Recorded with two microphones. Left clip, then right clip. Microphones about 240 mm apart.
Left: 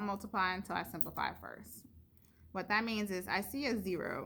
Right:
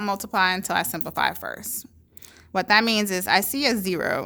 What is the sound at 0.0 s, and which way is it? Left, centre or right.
Speech, right.